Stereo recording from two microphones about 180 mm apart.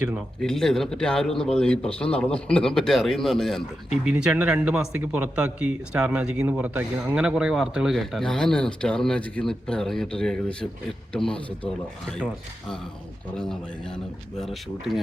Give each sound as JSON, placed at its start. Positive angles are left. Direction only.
{"t": 0.4, "sound": "speech", "side_deg": 5}
{"t": 13.3, "sound": "speech", "side_deg": 5}